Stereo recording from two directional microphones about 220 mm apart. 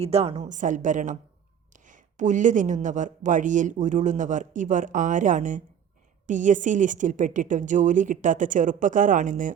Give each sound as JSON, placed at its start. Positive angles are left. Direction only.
{"t": 0.0, "sound": "speech", "side_deg": -30}